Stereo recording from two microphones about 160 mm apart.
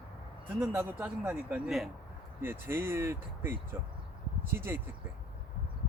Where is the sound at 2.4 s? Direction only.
15° right (ahead or behind).